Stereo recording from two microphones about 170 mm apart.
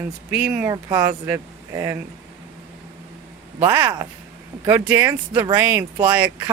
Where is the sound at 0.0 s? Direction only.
10° right (ahead or behind).